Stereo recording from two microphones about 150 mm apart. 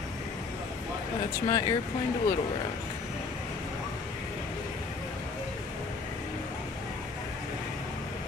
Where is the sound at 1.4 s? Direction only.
25° left (ahead or behind).